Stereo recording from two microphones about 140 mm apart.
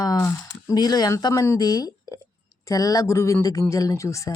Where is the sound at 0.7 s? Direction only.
30° left (ahead or behind).